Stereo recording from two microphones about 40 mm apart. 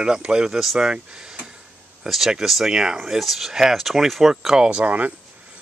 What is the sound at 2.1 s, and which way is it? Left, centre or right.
Speech, centre.